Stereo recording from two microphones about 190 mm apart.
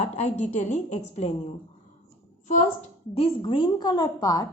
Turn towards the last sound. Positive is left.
turn(degrees=20)  # may be behind; listen again after turning